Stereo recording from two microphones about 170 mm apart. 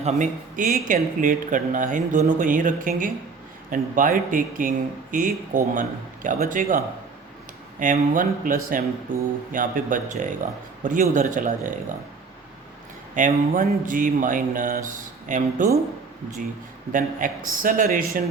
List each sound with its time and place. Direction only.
0.0 s speech: 45° right (ahead or behind)
13.1 s speech: 50° right (ahead or behind)
16.9 s speech: 50° right (ahead or behind)